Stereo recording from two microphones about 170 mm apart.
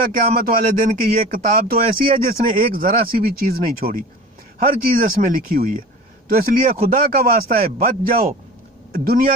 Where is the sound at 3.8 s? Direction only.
40° right (ahead or behind).